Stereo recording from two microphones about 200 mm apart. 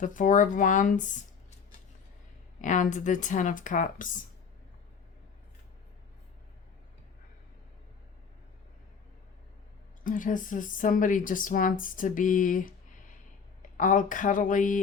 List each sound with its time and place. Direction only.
0.0 s a woman's voice: 40° left (ahead or behind)
2.6 s a woman's voice: 40° left (ahead or behind)
10.0 s a woman's voice: 40° left (ahead or behind)